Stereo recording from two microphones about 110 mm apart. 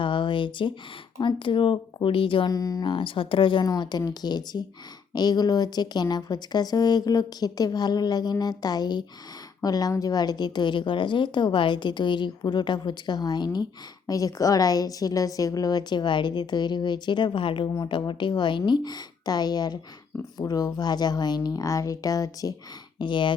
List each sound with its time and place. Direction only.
0.0 s a sound: 50° left (ahead or behind)
1.2 s speech: 50° left (ahead or behind)
2.5 s a woman's voice: 35° left (ahead or behind)
2.9 s speech: 50° left (ahead or behind)
3.7 s a woman's voice: 40° left (ahead or behind)
23.0 s speech: 45° left (ahead or behind)